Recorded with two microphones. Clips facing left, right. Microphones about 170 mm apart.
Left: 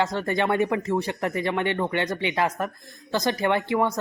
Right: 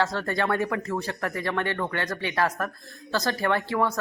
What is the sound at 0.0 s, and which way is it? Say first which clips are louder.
Speech: left 2 dB; 20° left (ahead or behind).